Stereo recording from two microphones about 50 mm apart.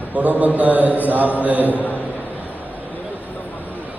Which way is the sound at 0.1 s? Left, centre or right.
Right.